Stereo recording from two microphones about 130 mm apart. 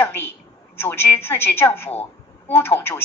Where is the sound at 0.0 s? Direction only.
15° left (ahead or behind).